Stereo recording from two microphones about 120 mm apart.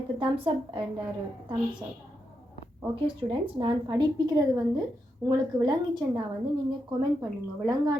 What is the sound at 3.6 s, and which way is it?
A woman's voice, 40° right (ahead or behind).